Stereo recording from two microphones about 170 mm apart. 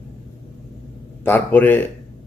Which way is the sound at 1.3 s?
10° left (ahead or behind).